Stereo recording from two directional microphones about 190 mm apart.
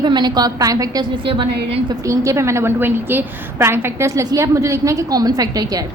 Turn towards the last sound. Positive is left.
turn(degrees=-20)  # may be behind; listen again after turning